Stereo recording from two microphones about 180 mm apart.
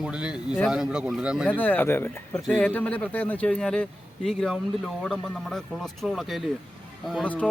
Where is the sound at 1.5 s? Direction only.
10° left (ahead or behind).